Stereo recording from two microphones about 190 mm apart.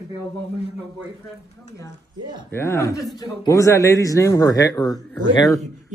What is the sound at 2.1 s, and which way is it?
Speech, 20° right (ahead or behind).